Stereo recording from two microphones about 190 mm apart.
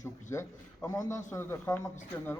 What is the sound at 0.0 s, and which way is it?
A man's voice, 15° left (ahead or behind).